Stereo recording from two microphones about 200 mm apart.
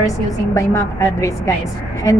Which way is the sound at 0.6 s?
15° left (ahead or behind).